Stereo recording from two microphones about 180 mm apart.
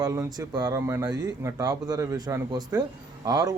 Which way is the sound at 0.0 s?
20° right (ahead or behind).